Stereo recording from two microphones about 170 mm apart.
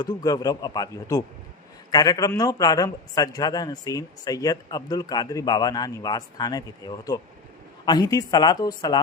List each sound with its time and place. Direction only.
0.0 s a man's voice: 25° left (ahead or behind)